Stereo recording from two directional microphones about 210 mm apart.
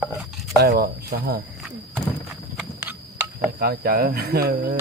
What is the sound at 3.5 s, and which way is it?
Speech, 45° right (ahead or behind).